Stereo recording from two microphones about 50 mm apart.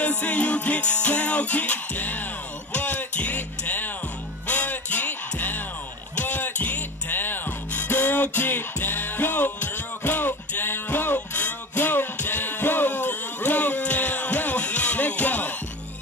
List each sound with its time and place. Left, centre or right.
0.2 s music: left
11.1 s music: left